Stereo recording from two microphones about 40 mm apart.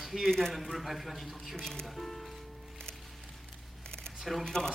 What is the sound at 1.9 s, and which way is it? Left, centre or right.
Speech, centre.